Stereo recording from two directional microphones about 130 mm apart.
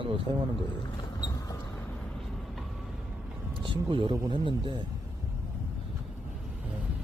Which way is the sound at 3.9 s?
40° right (ahead or behind).